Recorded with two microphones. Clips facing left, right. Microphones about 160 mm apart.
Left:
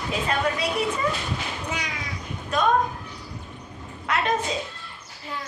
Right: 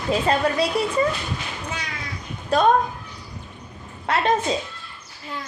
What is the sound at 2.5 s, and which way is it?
Speech, 35° right (ahead or behind).